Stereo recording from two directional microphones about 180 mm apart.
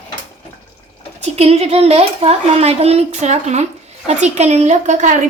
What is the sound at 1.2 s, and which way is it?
Speech, 35° right (ahead or behind).